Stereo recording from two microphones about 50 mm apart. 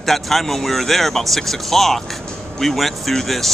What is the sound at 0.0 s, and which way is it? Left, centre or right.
Speech, centre.